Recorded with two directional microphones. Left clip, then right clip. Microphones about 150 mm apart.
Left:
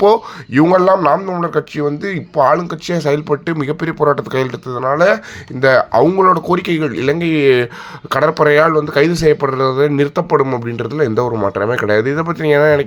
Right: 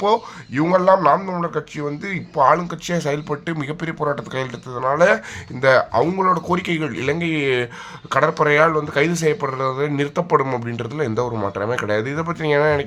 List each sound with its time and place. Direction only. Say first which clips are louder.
0.0 s speech: left 7 dB; 40° left (ahead or behind)
0.9 s speech: left 3 dB; 25° left (ahead or behind)
4.8 s speech: left 3 dB; 20° left (ahead or behind)
6.1 s speech: left 7 dB; 40° left (ahead or behind)
6.5 s speech: left 6 dB; 25° left (ahead or behind)